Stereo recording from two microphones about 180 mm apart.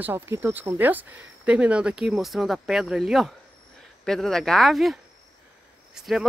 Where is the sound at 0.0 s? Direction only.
15° right (ahead or behind).